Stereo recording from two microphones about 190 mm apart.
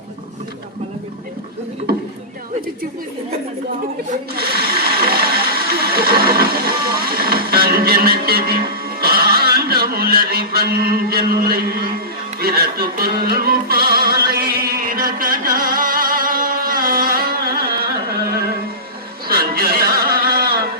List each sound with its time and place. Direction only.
4.4 s mechanisms: 55° right (ahead or behind)
12.4 s music: 55° right (ahead or behind)
19.3 s a sound: 55° right (ahead or behind)